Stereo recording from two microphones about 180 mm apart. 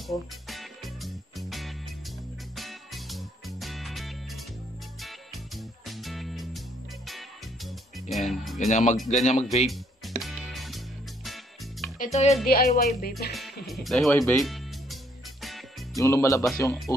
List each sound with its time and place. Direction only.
0.5 s music: centre (ahead or behind)
8.5 s speech: 40° left (ahead or behind)
8.9 s speech: centre (ahead or behind)
9.2 s speech: 40° left (ahead or behind)
9.7 s music: centre (ahead or behind)
12.0 s speech: 40° left (ahead or behind)
12.4 s speech: 55° left (ahead or behind)
13.3 s speech: centre (ahead or behind)
15.4 s music: centre (ahead or behind)
16.0 s speech: 15° left (ahead or behind)